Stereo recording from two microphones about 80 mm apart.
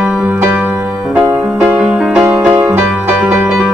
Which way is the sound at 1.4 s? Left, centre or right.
Centre.